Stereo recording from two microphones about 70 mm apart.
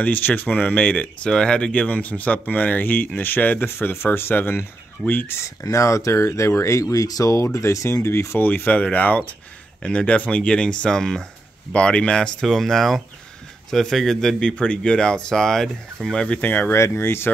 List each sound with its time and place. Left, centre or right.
0.0 s speech: left
5.6 s speech: left
8.5 s speech: left
12.4 s speech: centre
14.5 s speech: centre
16.3 s speech: left
16.7 s speech: left